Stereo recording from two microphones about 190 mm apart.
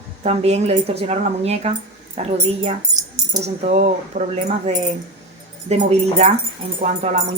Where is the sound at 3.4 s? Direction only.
35° right (ahead or behind).